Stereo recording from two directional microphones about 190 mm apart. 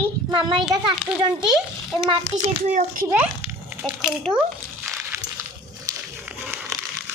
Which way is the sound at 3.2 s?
10° right (ahead or behind).